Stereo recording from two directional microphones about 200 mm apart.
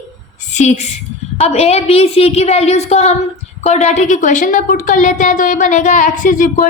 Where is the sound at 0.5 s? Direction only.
35° left (ahead or behind).